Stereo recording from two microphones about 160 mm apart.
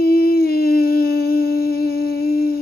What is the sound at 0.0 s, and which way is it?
Humming, 75° left (ahead or behind).